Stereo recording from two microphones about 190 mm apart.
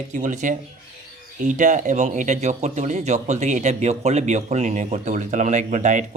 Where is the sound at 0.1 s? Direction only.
40° right (ahead or behind).